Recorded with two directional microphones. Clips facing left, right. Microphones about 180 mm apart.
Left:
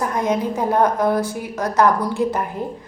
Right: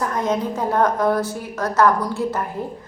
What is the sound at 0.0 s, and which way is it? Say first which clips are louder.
A woman's voice: left 1 dB; 10° left (ahead or behind).